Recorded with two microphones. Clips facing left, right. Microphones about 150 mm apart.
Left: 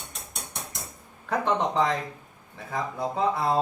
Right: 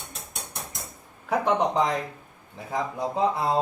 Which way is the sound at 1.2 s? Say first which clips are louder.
Right 2 dB; 15° right (ahead or behind).